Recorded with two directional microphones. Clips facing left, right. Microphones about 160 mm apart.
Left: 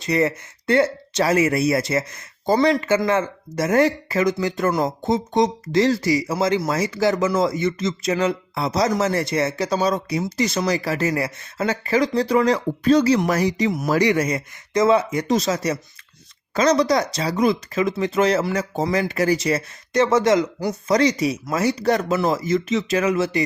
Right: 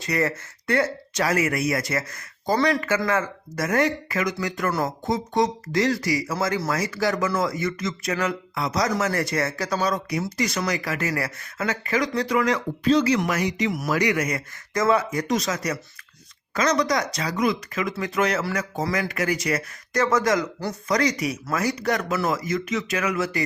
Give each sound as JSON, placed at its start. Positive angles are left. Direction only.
{"t": 0.0, "sound": "speech", "side_deg": 20}
{"t": 12.8, "sound": "speech", "side_deg": 45}
{"t": 13.1, "sound": "speech", "side_deg": 35}